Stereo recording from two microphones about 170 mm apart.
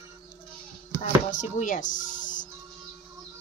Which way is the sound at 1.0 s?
45° left (ahead or behind).